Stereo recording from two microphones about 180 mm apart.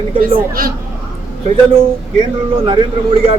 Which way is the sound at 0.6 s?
55° right (ahead or behind).